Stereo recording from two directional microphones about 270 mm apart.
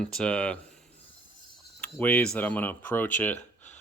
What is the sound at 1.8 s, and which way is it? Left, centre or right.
Speech, centre.